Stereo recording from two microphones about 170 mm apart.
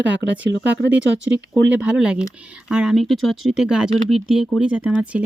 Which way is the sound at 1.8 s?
5° right (ahead or behind).